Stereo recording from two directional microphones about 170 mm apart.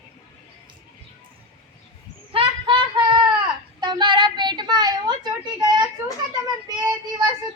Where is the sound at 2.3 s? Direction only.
30° right (ahead or behind).